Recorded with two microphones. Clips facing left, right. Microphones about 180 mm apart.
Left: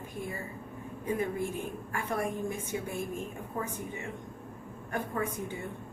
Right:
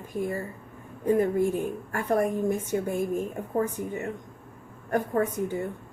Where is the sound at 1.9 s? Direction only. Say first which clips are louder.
Right 8 dB; 45° right (ahead or behind).